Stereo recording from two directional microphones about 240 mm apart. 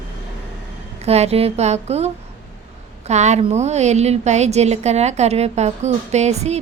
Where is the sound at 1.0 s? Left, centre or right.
Right.